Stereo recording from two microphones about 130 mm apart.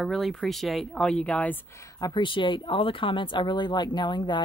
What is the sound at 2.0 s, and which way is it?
Speech, 35° left (ahead or behind).